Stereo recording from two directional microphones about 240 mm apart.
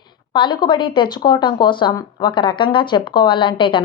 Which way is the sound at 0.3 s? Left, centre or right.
Centre.